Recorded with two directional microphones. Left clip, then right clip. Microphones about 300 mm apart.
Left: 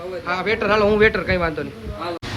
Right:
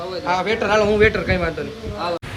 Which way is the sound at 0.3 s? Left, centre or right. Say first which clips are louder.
Right 1 dB; centre.